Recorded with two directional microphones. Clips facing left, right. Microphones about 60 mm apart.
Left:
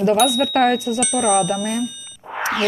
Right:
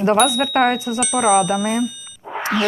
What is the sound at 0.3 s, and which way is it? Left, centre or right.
Speech, centre.